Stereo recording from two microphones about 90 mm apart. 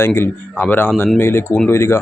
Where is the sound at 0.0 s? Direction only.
25° left (ahead or behind).